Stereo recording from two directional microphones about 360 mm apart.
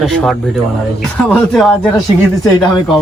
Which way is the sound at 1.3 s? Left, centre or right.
Centre.